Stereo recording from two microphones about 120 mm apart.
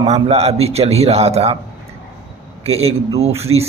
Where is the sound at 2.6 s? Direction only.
60° right (ahead or behind).